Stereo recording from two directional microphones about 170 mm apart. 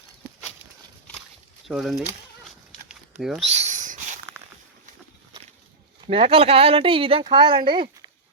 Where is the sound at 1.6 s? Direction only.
Centre (ahead or behind).